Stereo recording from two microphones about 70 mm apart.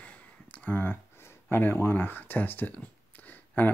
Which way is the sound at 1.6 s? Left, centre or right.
Left.